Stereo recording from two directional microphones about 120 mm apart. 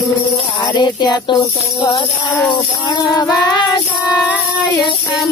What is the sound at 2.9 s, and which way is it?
Music, 35° left (ahead or behind).